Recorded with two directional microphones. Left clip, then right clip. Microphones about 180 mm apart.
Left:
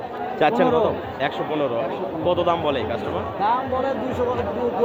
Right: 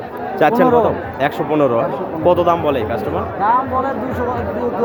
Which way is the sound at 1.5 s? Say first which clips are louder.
Right 8 dB; 35° right (ahead or behind).